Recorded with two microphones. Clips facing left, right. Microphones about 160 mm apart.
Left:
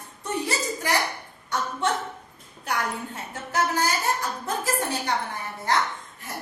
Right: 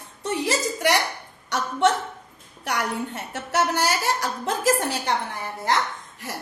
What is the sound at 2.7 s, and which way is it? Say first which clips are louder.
A woman's voice: right 2 dB; 75° right (ahead or behind).